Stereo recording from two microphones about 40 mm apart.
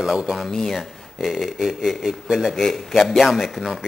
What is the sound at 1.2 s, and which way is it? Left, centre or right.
Speech, centre.